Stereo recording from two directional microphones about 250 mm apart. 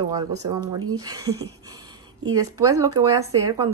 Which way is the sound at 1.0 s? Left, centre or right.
Centre.